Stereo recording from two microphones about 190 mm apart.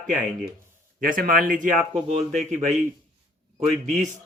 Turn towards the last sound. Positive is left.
turn(degrees=-35)  # may be behind; listen again after turning